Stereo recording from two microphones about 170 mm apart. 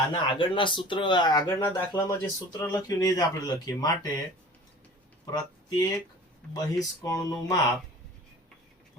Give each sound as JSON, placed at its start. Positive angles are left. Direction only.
{"t": 0.1, "sound": "speech", "side_deg": 25}
{"t": 5.2, "sound": "speech", "side_deg": 25}